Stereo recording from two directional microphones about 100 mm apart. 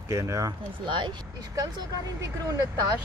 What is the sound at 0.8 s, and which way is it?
Speech, 55° right (ahead or behind).